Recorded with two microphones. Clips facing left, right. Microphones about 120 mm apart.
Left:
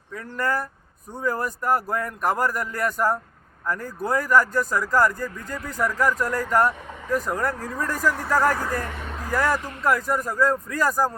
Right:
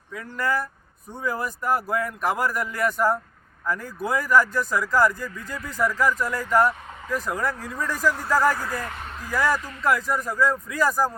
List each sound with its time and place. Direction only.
0.1 s speech: 10° right (ahead or behind)
7.6 s speech: 45° left (ahead or behind)
8.0 s speech: 5° right (ahead or behind)